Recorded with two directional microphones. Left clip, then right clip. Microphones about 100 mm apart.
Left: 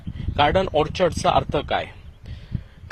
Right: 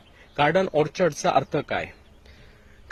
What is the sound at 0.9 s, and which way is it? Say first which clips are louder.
Speech: left 2 dB; 35° right (ahead or behind).